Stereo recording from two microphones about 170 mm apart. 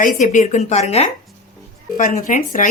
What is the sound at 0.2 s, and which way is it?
A woman's voice, 45° left (ahead or behind).